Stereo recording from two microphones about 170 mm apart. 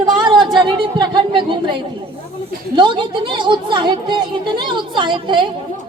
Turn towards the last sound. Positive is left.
turn(degrees=-30)  # may be behind; listen again after turning